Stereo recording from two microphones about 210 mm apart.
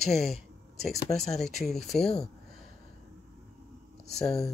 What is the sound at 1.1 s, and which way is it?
Speech, centre (ahead or behind).